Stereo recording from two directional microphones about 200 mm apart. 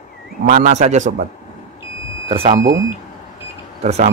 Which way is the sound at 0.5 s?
35° right (ahead or behind).